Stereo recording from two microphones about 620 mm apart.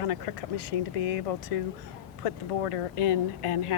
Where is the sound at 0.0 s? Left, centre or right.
Left.